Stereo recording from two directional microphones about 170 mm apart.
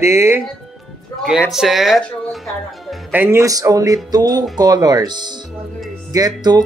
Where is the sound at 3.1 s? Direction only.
15° right (ahead or behind).